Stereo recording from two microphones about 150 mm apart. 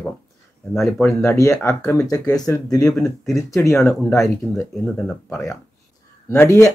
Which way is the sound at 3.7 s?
Centre (ahead or behind).